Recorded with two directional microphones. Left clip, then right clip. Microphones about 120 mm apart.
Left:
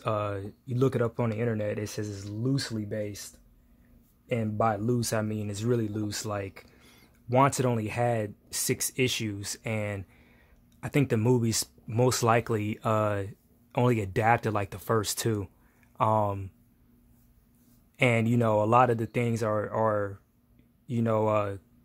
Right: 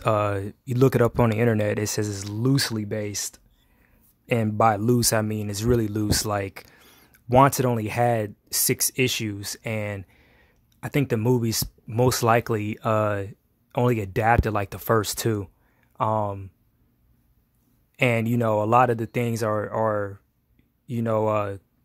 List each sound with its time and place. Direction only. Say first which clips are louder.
0.0 s speech: right 7 dB; 50° right (ahead or behind); by 14.8 s 25° right (ahead or behind)
14.8 s speech: right 7 dB; 40° right (ahead or behind)
15.0 s speech: right 4 dB; 25° right (ahead or behind)
17.9 s speech: right 3 dB; 25° right (ahead or behind)